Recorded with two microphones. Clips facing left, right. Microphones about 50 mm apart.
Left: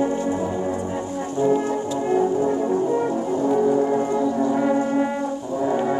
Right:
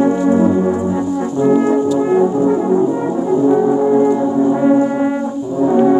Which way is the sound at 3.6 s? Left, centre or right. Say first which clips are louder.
Right 7 dB; right.